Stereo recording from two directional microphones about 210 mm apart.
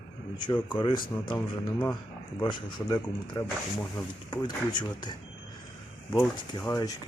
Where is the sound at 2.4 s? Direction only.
20° left (ahead or behind).